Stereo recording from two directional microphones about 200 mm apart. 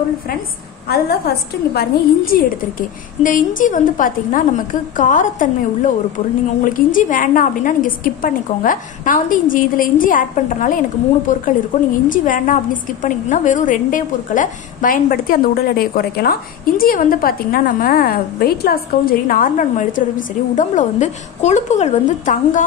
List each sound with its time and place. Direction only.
0.8 s a woman's voice: 50° left (ahead or behind)